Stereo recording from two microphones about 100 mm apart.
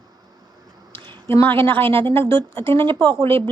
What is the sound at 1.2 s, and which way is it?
Speech, 25° left (ahead or behind).